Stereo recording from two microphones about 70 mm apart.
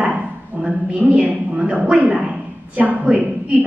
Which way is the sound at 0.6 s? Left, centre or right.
Centre.